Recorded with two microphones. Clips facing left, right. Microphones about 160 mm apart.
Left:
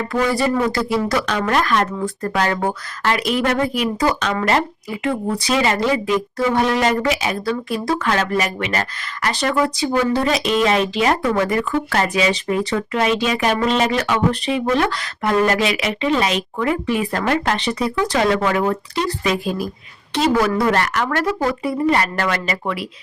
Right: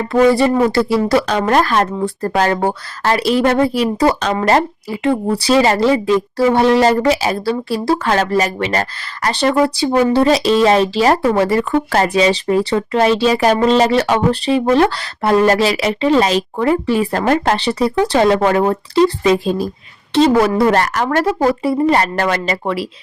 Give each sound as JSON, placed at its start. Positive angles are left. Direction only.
{"t": 0.1, "sound": "speech", "side_deg": -30}